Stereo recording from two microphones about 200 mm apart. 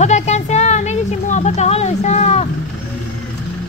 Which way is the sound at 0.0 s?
35° left (ahead or behind).